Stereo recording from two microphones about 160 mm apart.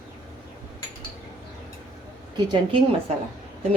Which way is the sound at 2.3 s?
30° right (ahead or behind).